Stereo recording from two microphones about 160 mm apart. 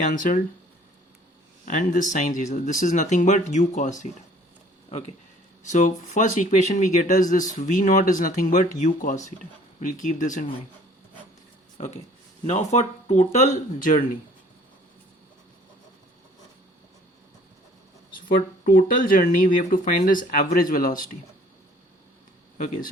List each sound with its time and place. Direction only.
0.0 s speech: 55° left (ahead or behind)
1.6 s speech: 55° left (ahead or behind)
12.5 s speech: 45° left (ahead or behind)
18.3 s speech: 55° left (ahead or behind)
22.5 s speech: 60° left (ahead or behind)